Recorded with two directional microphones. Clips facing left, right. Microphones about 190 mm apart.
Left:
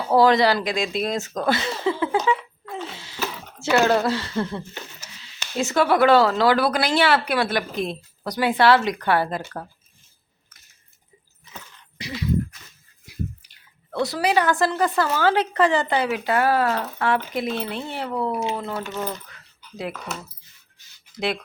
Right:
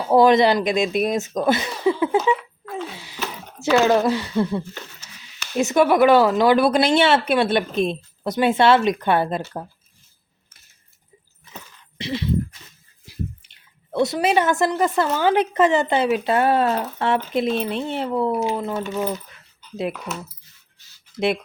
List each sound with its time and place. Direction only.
0.1 s speech: 20° right (ahead or behind)
2.8 s a sound: 15° right (ahead or behind)
3.8 s speech: 15° right (ahead or behind)
11.9 s horse: 25° right (ahead or behind)
13.1 s speech: 25° right (ahead or behind)